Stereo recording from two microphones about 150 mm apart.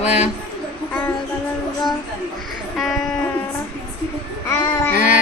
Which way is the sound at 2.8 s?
Centre (ahead or behind).